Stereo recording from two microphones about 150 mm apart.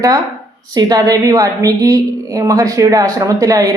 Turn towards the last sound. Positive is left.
turn(degrees=-20)  # may be behind; listen again after turning